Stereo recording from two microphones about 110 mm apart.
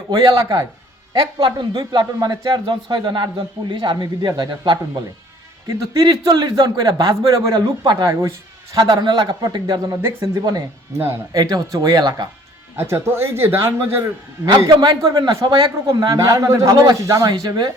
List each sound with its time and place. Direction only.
0.1 s a man's voice: 40° right (ahead or behind)
1.4 s a man's voice: 50° right (ahead or behind)
6.1 s a man's voice: 45° right (ahead or behind)
10.0 s a man's voice: 30° right (ahead or behind)
12.7 s speech: 20° right (ahead or behind)
14.7 s a man's voice: 40° right (ahead or behind)